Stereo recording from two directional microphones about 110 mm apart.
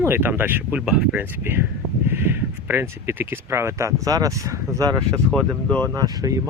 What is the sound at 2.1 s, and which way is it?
Speech, 20° right (ahead or behind).